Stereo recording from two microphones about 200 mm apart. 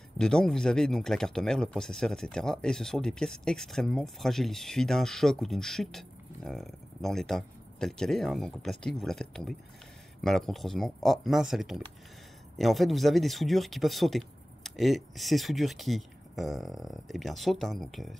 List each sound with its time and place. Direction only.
0.2 s speech: 5° left (ahead or behind)